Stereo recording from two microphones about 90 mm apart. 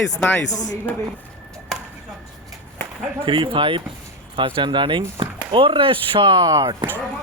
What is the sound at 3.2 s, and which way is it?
Speech, 75° right (ahead or behind).